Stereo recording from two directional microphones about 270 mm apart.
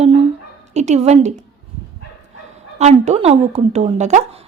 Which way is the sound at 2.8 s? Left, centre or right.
Right.